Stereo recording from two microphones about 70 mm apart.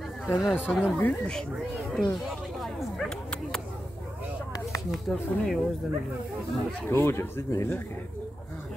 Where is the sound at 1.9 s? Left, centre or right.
Centre.